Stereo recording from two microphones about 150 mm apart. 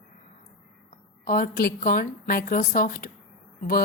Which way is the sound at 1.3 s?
70° left (ahead or behind).